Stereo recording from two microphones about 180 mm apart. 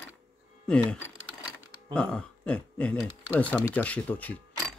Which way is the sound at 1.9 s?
5° left (ahead or behind).